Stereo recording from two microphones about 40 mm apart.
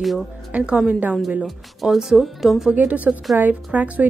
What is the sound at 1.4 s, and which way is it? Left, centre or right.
Speech, centre.